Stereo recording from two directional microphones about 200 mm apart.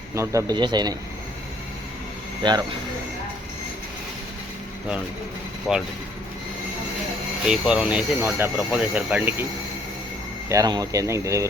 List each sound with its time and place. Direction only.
0.1 s a man's voice: 15° right (ahead or behind)
2.4 s a man's voice: 20° right (ahead or behind)
5.7 s speech: 5° right (ahead or behind)
7.4 s speech: 5° right (ahead or behind)
10.5 s speech: 20° right (ahead or behind)